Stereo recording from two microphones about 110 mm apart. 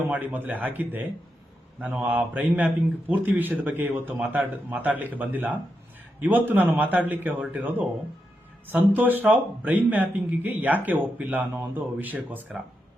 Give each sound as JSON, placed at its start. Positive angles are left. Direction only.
{"t": 0.1, "sound": "speech", "side_deg": -15}